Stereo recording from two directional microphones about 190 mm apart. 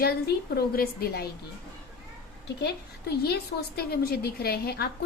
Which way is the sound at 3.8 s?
55° left (ahead or behind).